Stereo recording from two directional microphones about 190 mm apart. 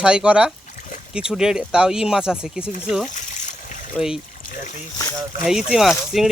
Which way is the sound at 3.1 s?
40° left (ahead or behind).